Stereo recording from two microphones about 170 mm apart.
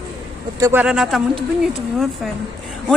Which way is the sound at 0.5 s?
20° right (ahead or behind).